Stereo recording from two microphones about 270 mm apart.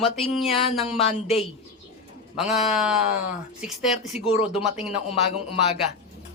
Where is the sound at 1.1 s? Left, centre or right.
Left.